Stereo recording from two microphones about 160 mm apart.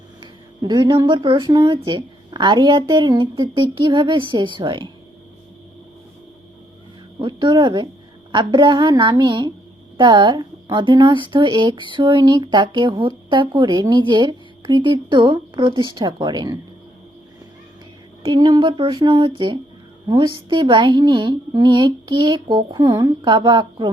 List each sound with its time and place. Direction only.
0.2 s speech: 25° right (ahead or behind)
7.2 s speech: 30° right (ahead or behind)
18.3 s speech: 25° right (ahead or behind)